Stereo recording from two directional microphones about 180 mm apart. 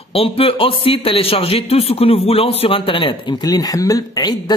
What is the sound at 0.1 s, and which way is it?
A man's voice, 30° left (ahead or behind).